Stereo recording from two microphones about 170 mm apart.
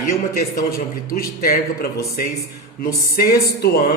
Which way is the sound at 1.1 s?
60° left (ahead or behind).